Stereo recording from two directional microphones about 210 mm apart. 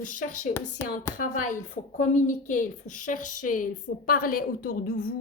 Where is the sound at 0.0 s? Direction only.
40° left (ahead or behind).